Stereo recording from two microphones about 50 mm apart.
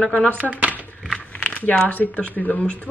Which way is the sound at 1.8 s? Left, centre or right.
Left.